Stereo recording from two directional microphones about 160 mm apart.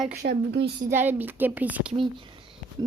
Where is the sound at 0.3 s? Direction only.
90° right.